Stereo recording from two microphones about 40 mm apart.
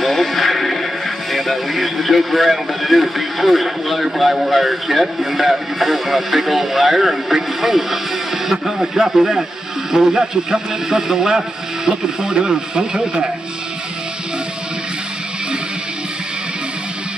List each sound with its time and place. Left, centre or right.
0.0 s music: centre
1.3 s a man's voice: centre